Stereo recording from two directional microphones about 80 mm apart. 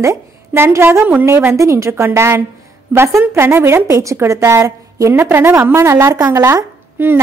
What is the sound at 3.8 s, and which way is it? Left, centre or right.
A woman's voice, right.